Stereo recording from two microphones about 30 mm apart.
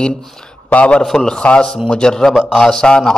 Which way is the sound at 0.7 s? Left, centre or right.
Left.